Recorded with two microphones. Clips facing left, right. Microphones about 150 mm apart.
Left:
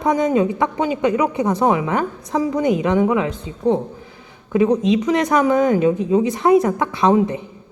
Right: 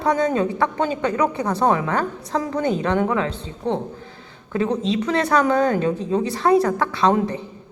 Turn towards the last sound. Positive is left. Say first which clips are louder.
# left 2 dB
turn(degrees=20)  # may be behind; listen again after turning